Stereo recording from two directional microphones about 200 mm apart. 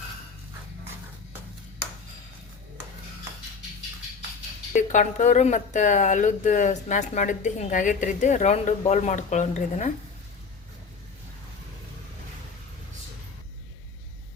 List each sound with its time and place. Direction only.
4.7 s speech: 40° left (ahead or behind)